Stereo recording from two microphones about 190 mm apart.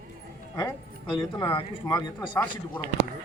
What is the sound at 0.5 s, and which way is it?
Speech, 20° left (ahead or behind).